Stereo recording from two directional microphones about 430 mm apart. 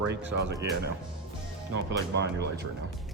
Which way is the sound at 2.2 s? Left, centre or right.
Right.